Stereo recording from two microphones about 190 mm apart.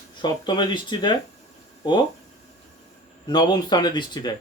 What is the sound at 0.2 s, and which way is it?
Speech, 25° left (ahead or behind).